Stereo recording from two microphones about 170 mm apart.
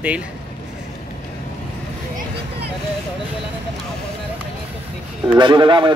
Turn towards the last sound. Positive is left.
turn(degrees=-30)  # may be behind; listen again after turning